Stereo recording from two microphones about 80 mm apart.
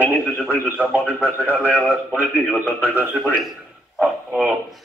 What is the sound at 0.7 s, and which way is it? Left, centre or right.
A man's voice, right.